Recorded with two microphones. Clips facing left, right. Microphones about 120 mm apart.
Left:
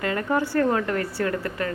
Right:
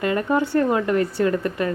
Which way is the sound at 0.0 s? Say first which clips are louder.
Right 3 dB; 20° right (ahead or behind).